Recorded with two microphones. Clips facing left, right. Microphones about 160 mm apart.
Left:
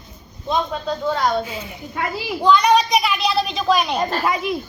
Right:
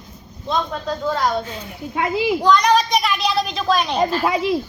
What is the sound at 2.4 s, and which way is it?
A woman's voice, 5° left (ahead or behind).